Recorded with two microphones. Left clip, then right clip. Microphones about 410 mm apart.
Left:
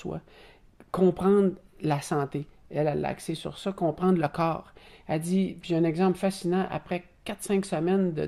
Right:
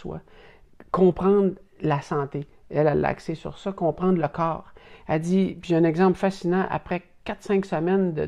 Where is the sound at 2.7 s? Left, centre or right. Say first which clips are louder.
Right 6 dB; right.